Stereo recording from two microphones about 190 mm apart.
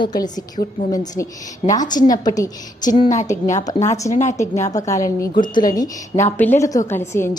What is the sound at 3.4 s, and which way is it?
Speech, 40° left (ahead or behind).